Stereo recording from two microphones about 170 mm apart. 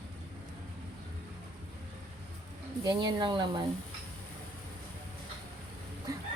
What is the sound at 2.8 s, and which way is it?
Speech, 25° right (ahead or behind).